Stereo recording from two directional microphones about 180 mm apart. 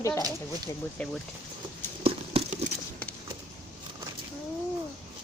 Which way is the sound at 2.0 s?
35° right (ahead or behind).